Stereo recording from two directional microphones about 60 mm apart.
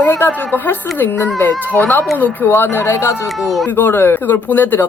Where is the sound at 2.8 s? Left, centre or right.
Left.